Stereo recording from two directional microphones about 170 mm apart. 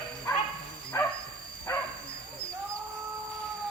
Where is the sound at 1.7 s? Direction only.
20° left (ahead or behind).